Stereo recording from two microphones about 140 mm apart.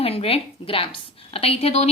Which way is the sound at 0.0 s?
45° left (ahead or behind).